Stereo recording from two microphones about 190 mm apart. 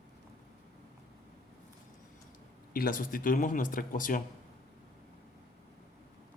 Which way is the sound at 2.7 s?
45° left (ahead or behind).